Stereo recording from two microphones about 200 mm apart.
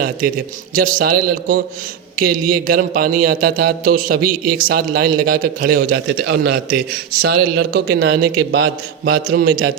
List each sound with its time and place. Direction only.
0.2 s a man's voice: 45° right (ahead or behind)